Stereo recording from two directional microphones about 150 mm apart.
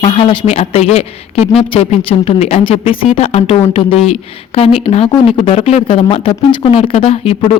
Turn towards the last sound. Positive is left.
turn(degrees=40)  # may be behind; listen again after turning